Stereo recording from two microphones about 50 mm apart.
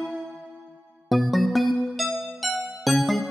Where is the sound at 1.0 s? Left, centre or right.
Centre.